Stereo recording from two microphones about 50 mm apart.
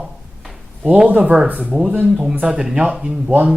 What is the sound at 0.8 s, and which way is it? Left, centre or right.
Speech, right.